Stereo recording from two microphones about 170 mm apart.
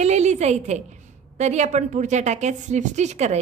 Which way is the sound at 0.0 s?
40° right (ahead or behind).